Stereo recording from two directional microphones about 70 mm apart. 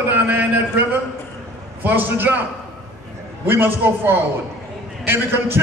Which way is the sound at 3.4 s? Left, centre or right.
Right.